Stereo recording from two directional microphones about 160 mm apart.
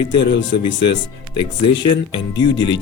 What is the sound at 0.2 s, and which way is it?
Speech, 90° left.